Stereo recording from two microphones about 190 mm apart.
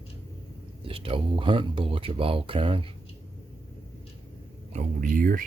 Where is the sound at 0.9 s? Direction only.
30° right (ahead or behind).